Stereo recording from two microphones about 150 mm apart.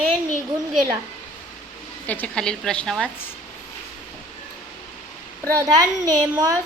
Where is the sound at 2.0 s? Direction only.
10° left (ahead or behind).